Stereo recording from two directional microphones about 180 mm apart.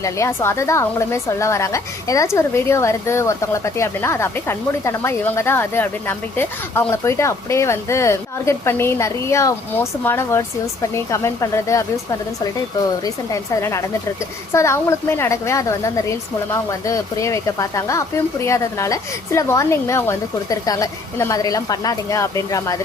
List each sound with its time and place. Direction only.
0.0 s a woman's voice: 15° left (ahead or behind)
13.1 s a woman's voice: 15° left (ahead or behind)